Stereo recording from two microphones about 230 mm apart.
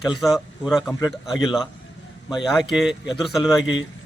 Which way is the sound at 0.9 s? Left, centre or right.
Centre.